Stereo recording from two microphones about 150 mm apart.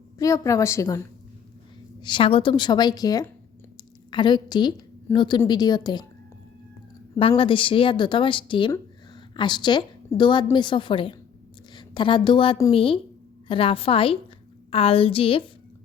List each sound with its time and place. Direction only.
0.2 s a woman's voice: 20° left (ahead or behind)
2.0 s a woman's voice: 30° left (ahead or behind)
7.2 s a woman's voice: 35° left (ahead or behind)